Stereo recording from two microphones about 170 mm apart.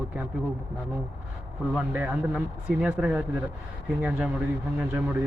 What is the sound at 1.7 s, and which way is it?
A man's voice, 10° right (ahead or behind).